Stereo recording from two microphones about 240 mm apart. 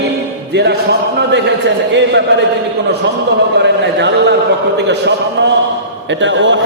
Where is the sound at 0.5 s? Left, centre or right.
Right.